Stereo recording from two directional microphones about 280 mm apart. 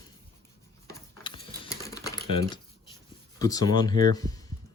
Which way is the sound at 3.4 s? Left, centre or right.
Centre.